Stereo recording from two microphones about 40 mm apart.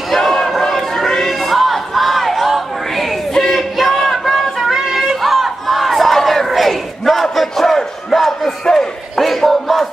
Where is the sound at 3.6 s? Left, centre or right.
Centre.